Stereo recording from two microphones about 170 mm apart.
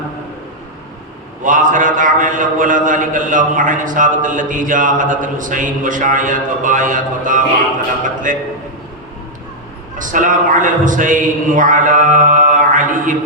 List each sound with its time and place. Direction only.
1.5 s a man's voice: 50° right (ahead or behind)
10.0 s a man's voice: 50° right (ahead or behind)